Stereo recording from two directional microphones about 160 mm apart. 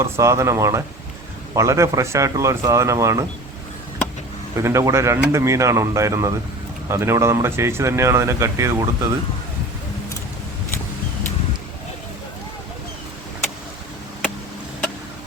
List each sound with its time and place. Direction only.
0.0 s speech: 20° right (ahead or behind)
4.5 s speech: 20° right (ahead or behind)